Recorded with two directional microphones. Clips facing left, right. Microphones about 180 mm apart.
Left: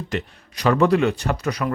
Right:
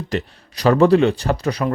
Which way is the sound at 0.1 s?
35° right (ahead or behind).